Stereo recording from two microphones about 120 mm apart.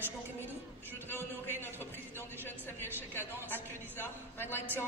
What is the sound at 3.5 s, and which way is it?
A woman's voice, 15° left (ahead or behind).